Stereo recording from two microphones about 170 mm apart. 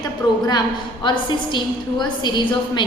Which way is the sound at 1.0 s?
25° left (ahead or behind).